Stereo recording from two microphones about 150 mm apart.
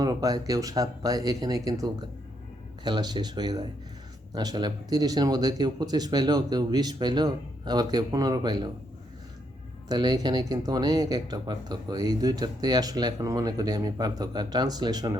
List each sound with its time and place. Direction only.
0.0 s speech: 25° right (ahead or behind)
9.9 s speech: 25° right (ahead or behind)